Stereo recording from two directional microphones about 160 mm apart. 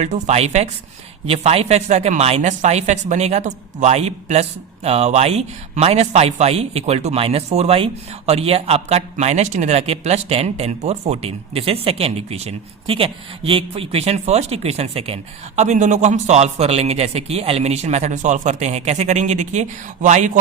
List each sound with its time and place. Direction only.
0.0 s a man's voice: 45° right (ahead or behind)